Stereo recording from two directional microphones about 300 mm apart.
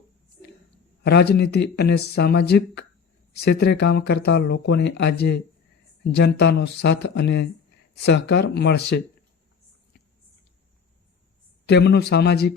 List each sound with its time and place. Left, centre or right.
1.0 s speech: left
11.6 s speech: left